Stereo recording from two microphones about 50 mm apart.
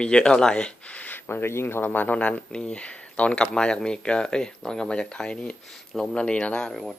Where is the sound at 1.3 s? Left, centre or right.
Left.